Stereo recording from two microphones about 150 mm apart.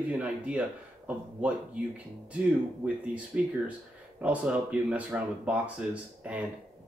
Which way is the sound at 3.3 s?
10° right (ahead or behind).